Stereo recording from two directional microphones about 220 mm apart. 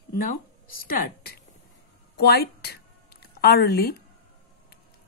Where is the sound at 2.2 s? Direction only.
45° left (ahead or behind).